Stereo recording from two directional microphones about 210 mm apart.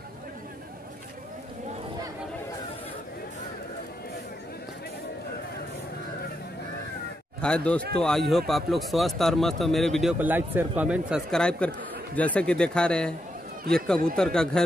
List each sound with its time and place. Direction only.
7.4 s speech: 5° left (ahead or behind)